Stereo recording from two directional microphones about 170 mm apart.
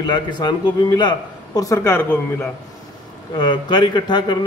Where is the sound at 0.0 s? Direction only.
25° left (ahead or behind).